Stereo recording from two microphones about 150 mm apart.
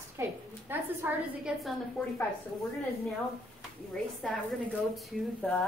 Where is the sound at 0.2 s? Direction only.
15° right (ahead or behind).